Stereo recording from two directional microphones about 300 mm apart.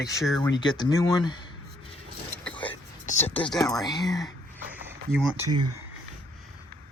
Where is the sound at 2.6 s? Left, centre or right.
Centre.